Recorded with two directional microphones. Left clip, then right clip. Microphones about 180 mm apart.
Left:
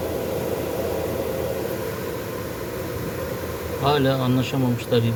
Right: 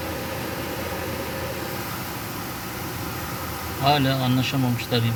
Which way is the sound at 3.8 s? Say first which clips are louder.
Even; 25° left (ahead or behind).